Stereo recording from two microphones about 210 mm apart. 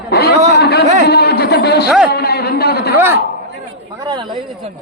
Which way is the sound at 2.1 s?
50° left (ahead or behind).